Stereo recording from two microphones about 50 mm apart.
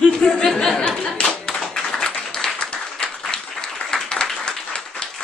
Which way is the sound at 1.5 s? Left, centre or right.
Centre.